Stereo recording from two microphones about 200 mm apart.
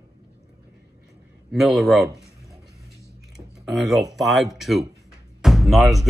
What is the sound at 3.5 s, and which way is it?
Speech, centre (ahead or behind).